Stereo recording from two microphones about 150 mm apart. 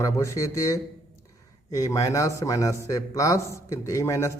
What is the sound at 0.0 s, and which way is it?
A man's voice, 20° left (ahead or behind).